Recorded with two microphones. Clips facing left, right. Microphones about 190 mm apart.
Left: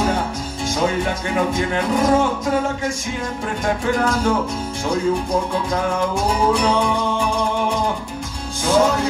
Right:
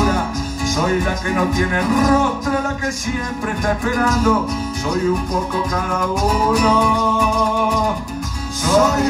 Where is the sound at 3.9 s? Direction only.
30° left (ahead or behind).